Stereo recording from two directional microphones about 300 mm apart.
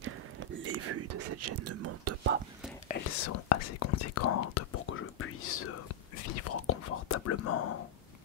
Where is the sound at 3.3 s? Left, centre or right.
Left.